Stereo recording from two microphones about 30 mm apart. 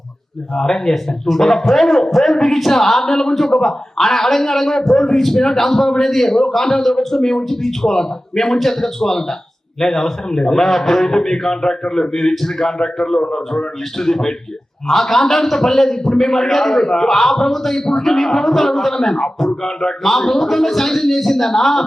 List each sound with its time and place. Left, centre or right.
0.5 s a man's voice: centre
12.5 s a man's voice: centre